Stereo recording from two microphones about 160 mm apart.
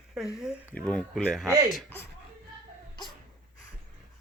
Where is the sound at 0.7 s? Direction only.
5° left (ahead or behind).